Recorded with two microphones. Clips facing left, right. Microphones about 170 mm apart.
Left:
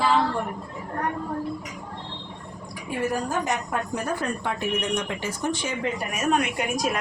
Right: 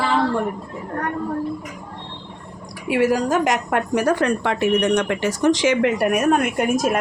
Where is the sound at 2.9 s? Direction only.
90° right.